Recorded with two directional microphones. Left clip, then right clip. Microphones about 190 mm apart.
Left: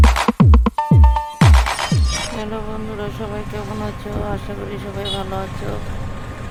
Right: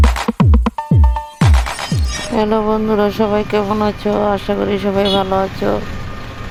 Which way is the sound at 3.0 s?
40° right (ahead or behind).